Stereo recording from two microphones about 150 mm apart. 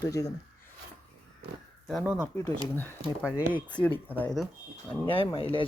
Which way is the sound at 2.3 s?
25° left (ahead or behind).